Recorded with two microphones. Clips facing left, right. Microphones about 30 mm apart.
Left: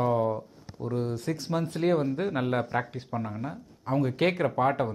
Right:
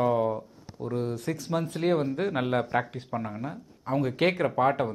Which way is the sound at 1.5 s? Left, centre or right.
Right.